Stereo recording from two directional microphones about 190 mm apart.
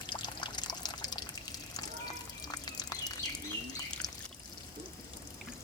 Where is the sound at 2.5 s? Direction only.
20° left (ahead or behind).